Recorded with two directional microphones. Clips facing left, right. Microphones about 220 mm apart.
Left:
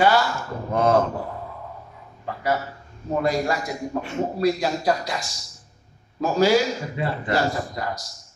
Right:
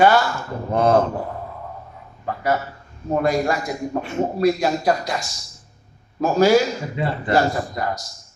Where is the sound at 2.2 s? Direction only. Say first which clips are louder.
Right 3 dB; 50° right (ahead or behind).